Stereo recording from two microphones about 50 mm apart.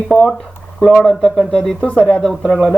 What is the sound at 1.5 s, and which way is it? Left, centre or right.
Speech, centre.